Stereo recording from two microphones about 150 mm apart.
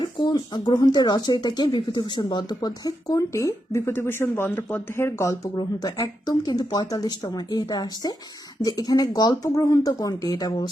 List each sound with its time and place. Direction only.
0.0 s speech: 30° left (ahead or behind)